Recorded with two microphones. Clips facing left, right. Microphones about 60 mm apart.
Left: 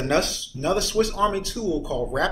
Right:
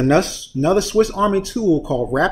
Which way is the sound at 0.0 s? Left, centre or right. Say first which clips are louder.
Right 7 dB; right.